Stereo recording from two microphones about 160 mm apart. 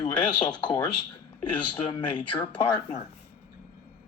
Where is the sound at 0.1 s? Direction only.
5° left (ahead or behind).